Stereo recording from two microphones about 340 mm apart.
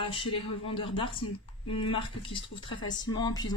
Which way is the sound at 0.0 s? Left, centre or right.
Centre.